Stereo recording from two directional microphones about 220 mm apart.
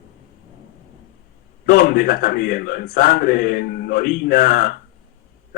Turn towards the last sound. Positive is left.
turn(degrees=40)  # may be behind; listen again after turning